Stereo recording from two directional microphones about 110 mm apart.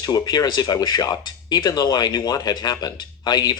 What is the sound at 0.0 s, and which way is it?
Speech, 40° left (ahead or behind).